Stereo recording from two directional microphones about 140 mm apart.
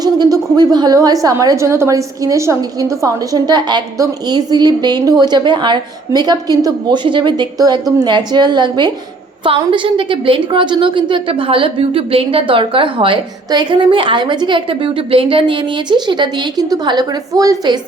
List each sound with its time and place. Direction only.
0.0 s a woman's voice: 30° right (ahead or behind)